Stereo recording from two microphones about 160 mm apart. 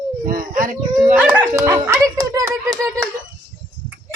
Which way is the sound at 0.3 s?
60° right (ahead or behind).